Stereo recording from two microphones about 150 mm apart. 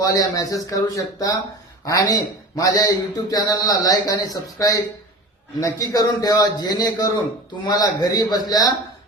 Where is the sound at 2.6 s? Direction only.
25° left (ahead or behind).